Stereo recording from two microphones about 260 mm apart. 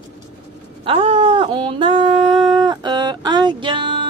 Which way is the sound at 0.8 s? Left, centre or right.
Right.